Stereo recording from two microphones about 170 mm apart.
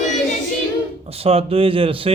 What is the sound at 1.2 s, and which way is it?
Speech, 35° right (ahead or behind).